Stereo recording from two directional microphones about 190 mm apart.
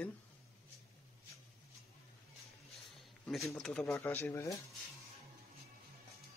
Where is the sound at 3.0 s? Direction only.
Centre (ahead or behind).